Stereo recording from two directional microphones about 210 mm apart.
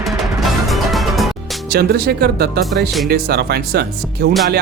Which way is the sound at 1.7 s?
45° right (ahead or behind).